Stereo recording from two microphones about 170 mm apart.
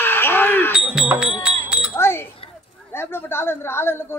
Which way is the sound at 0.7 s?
5° right (ahead or behind).